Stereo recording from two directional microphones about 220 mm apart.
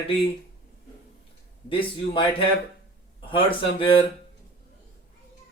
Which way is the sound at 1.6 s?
25° left (ahead or behind).